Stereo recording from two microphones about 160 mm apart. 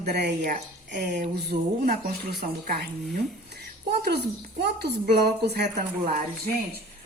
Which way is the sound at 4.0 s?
90° right.